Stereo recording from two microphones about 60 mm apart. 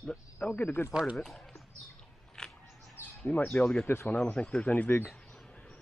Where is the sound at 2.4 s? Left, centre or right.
Centre.